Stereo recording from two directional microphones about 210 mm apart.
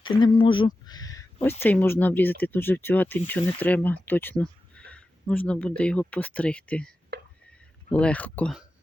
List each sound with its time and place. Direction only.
0.0 s speech: 25° left (ahead or behind); by 6.9 s 5° left (ahead or behind)
7.1 s a sound: 50° right (ahead or behind)
7.9 s speech: 5° left (ahead or behind)